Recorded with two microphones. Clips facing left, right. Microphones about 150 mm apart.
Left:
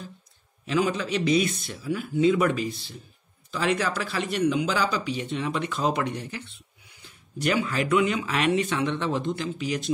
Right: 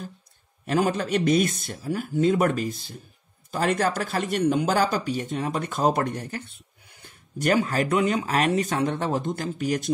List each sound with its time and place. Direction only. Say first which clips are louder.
0.7 s speech: right 2 dB; 50° right (ahead or behind)